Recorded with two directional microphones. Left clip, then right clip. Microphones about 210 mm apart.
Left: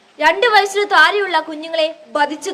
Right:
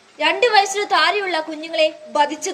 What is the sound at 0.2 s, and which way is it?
A woman's voice, 20° left (ahead or behind).